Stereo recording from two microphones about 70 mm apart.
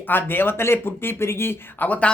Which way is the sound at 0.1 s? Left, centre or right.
Left.